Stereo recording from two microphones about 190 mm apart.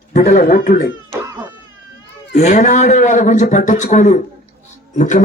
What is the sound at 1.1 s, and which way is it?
Baby cry, 15° right (ahead or behind).